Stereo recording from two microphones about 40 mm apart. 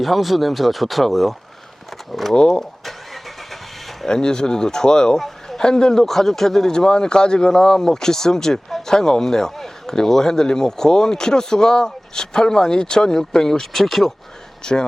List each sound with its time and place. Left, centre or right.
0.0 s speech: centre
2.3 s speech: left
2.8 s vehicle: centre
4.1 s speech: centre
5.2 s a sound: centre
5.6 s speech: centre
14.6 s speech: centre